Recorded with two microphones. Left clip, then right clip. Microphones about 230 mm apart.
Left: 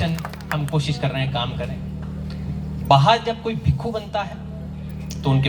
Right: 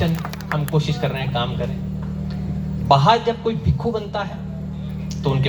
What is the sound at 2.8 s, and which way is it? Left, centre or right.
A man's voice, left.